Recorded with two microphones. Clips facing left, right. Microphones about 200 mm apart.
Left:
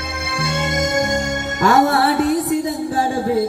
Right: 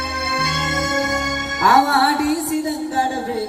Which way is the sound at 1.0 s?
30° left (ahead or behind).